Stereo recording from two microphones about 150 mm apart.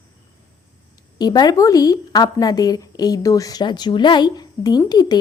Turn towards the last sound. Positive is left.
turn(degrees=25)  # may be behind; listen again after turning